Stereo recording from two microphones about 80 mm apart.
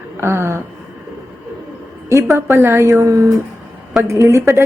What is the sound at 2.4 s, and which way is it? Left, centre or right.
A woman's voice, right.